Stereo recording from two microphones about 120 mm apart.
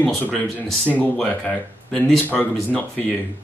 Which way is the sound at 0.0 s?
10° left (ahead or behind).